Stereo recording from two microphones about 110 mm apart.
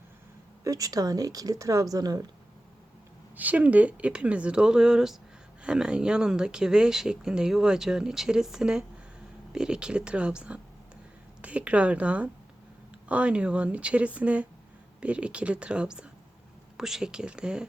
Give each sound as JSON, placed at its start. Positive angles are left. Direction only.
{"t": 0.6, "sound": "speech", "side_deg": -35}
{"t": 3.3, "sound": "speech", "side_deg": -15}